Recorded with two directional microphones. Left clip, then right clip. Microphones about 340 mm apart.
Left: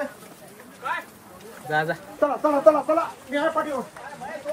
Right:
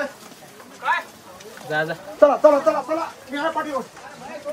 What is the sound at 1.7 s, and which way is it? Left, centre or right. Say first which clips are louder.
Speech: even; centre.